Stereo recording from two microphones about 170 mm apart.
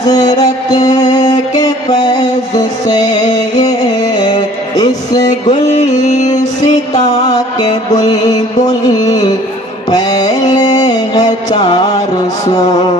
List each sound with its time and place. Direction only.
0.4 s music: 20° left (ahead or behind)
5.5 s music: 45° left (ahead or behind)
7.0 s mantra: 40° left (ahead or behind)
7.3 s music: 25° left (ahead or behind)